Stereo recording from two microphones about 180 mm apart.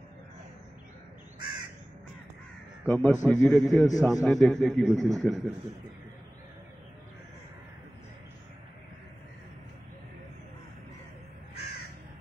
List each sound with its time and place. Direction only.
2.9 s a man's voice: 5° left (ahead or behind)